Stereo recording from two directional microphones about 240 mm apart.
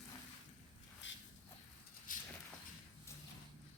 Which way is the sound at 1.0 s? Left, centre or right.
Left.